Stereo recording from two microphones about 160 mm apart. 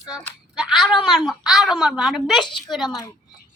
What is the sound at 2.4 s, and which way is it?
Speech, 30° left (ahead or behind).